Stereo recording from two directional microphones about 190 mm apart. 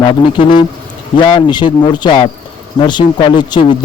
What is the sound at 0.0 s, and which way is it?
A man's voice, 25° left (ahead or behind).